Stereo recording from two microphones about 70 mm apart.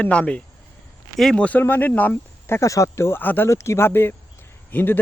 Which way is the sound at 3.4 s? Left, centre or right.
Left.